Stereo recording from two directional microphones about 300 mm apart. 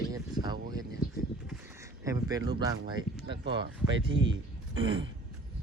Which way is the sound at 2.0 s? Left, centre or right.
Centre.